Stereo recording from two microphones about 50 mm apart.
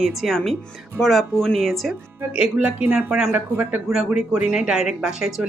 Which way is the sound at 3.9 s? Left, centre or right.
Centre.